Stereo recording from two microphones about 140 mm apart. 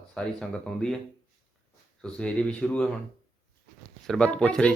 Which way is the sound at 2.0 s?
5° left (ahead or behind).